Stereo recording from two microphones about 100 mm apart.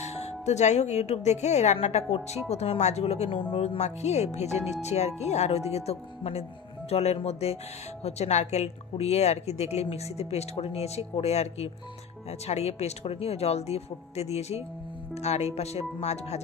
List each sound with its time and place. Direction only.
0.0 s speech: 90° left
3.5 s speech: 90° left